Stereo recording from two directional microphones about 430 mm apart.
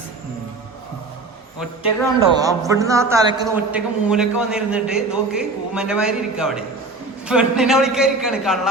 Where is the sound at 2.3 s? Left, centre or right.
Centre.